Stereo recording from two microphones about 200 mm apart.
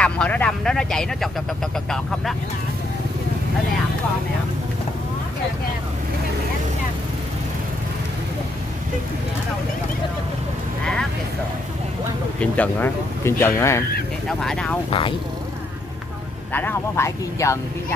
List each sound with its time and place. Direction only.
0.0 s speech: 5° left (ahead or behind)
12.4 s speech: 10° left (ahead or behind)
14.4 s speech: 5° left (ahead or behind)
14.9 s speech: 25° left (ahead or behind)
16.5 s speech: 10° left (ahead or behind)